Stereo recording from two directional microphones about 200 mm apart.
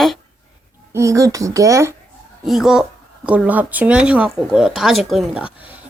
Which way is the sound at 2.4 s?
Centre (ahead or behind).